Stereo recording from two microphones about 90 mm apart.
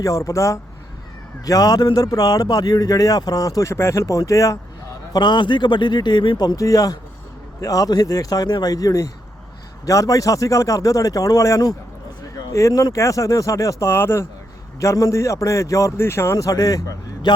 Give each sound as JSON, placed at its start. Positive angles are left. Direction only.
{"t": 0.0, "sound": "a man's voice", "side_deg": 35}
{"t": 5.1, "sound": "speech", "side_deg": 55}
{"t": 6.6, "sound": "a man's voice", "side_deg": 40}